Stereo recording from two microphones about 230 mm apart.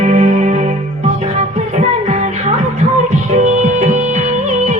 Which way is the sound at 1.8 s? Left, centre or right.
Right.